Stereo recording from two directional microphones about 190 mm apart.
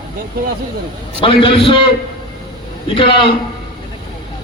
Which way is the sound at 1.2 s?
30° left (ahead or behind).